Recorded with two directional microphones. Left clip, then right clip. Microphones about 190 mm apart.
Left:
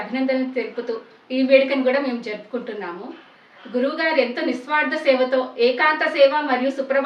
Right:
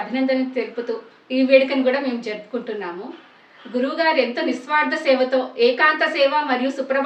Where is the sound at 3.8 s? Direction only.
10° right (ahead or behind).